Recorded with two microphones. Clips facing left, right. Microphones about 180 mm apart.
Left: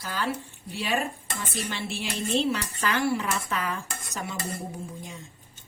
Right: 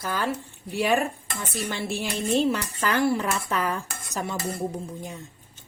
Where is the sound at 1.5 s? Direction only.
45° right (ahead or behind).